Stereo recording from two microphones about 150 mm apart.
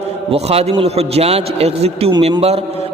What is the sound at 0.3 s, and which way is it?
A man's voice, 45° right (ahead or behind).